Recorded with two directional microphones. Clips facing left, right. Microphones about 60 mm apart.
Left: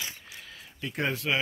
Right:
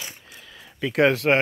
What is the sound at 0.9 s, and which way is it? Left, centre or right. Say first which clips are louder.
Speech: right 10 dB; right.